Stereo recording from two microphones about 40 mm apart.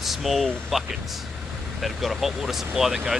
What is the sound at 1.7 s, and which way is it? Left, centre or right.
Speech, centre.